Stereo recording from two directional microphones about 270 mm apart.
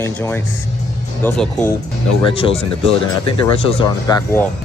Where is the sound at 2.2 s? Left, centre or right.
Centre.